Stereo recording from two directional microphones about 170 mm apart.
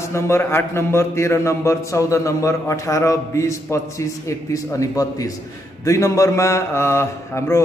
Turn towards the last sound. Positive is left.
turn(degrees=15)  # may be behind; listen again after turning